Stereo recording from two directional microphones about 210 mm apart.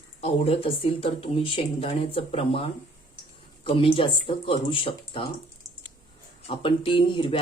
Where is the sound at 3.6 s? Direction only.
25° left (ahead or behind).